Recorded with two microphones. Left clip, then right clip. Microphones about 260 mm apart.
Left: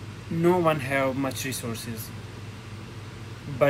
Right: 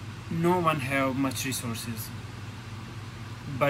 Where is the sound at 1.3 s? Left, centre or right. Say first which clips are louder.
Left 1 dB; left.